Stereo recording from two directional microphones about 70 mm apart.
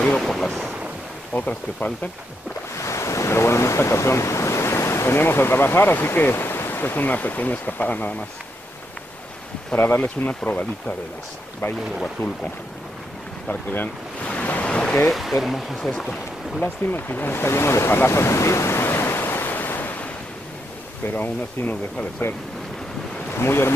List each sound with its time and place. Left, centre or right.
0.2 s speech: centre
1.3 s speech: left
2.8 s speech: left
9.8 s speech: left
13.5 s speech: left
15.0 s speech: centre
15.9 s speech: centre
16.6 s speech: left
23.3 s speech: left